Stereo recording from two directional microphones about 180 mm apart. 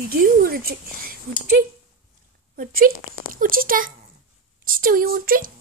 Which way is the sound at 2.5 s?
50° right (ahead or behind).